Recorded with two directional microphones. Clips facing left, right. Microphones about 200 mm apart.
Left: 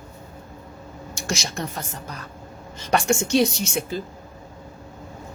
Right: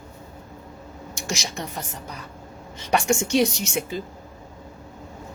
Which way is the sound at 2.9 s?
15° right (ahead or behind).